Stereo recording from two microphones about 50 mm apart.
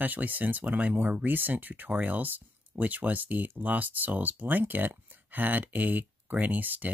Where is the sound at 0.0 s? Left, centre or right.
Right.